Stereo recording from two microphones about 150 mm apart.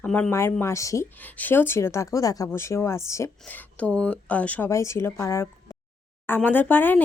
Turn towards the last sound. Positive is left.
turn(degrees=15)  # may be behind; listen again after turning